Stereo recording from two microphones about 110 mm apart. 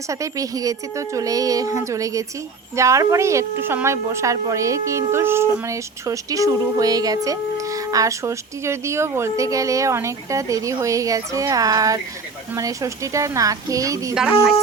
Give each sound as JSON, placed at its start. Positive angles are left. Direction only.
{"t": 0.1, "sound": "a woman's voice", "side_deg": -30}